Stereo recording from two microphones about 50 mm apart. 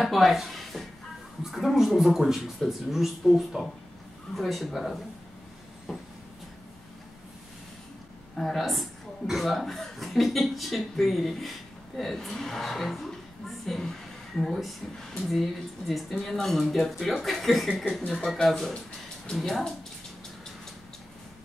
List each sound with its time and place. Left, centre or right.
0.0 s a man's voice: centre
5.9 s a sound: centre
8.4 s a man's voice: centre
15.9 s a man's voice: centre
19.3 s a man's voice: centre